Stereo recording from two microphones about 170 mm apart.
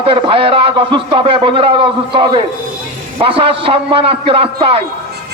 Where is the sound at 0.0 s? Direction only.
30° right (ahead or behind).